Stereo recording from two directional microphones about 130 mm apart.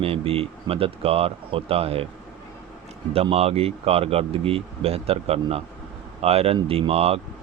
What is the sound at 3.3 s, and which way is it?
Speech, 50° right (ahead or behind).